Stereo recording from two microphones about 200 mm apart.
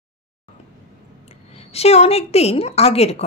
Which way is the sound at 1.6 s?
30° left (ahead or behind).